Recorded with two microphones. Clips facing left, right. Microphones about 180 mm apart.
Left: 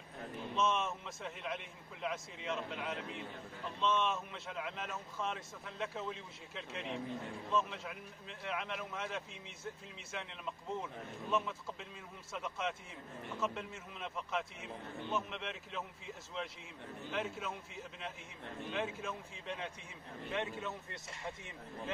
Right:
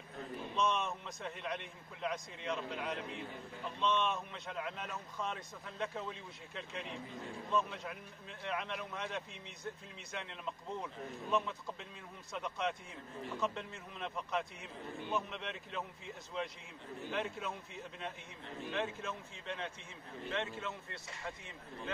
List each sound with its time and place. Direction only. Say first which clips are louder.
0.6 s speech: even; 5° left (ahead or behind)
17.1 s speech: even; 5° left (ahead or behind)